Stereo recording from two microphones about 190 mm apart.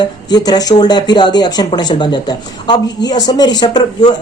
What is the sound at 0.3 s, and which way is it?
Speech, 20° left (ahead or behind).